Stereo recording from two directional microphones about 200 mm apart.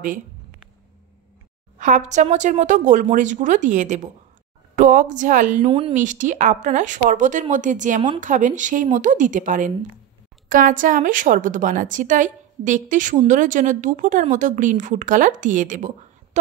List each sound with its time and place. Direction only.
1.8 s a woman's voice: 40° right (ahead or behind)
5.7 s a woman's voice: 25° right (ahead or behind)